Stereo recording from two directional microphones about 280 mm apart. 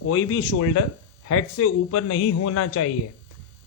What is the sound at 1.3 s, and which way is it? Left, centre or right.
A man's voice, left.